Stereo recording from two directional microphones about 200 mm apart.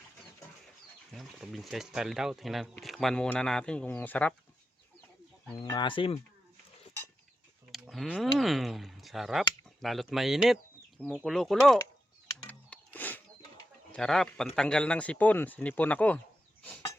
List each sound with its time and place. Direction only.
1.1 s speech: centre (ahead or behind)
5.5 s speech: 20° left (ahead or behind)
7.7 s speech: centre (ahead or behind)
12.5 s music: 10° left (ahead or behind)
13.9 s speech: 5° left (ahead or behind)